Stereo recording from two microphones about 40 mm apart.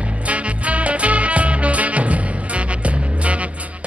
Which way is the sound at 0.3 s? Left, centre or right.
Right.